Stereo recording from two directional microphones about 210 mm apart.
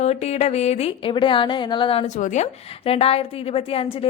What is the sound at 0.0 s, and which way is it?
A woman's voice, 30° left (ahead or behind).